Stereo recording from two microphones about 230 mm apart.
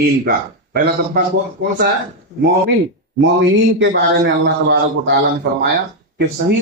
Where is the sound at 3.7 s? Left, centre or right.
Right.